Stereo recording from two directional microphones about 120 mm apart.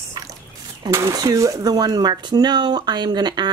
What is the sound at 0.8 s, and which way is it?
Speech, 30° right (ahead or behind).